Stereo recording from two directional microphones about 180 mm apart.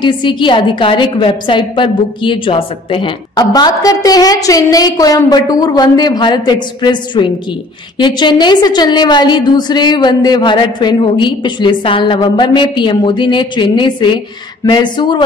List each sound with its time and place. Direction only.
0.0 s a woman's voice: 25° left (ahead or behind)